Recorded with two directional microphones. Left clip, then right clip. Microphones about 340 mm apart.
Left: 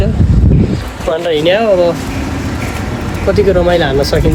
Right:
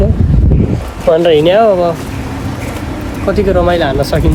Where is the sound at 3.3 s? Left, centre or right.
Centre.